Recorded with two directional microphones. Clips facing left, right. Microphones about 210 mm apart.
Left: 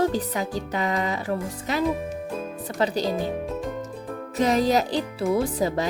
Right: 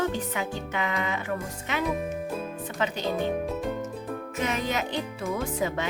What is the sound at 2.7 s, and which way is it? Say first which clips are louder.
Speech: left 6 dB; 35° left (ahead or behind).